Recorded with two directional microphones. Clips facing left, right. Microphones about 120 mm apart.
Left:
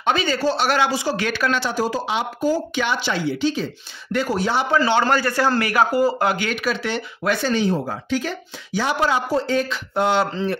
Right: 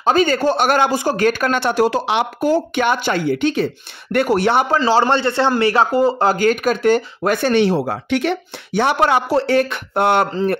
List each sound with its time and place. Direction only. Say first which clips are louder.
0.0 s speech: right 5 dB; 45° right (ahead or behind); by 4.6 s 65° right (ahead or behind)
4.7 s a man's voice: right 3 dB; 30° right (ahead or behind)
6.3 s speech: right 7 dB; 45° right (ahead or behind); by 10.2 s 60° right (ahead or behind)
10.3 s speech: right 5 dB; 45° right (ahead or behind)